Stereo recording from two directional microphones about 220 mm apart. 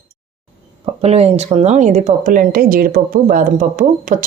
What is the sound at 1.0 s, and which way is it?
Speech, 30° right (ahead or behind).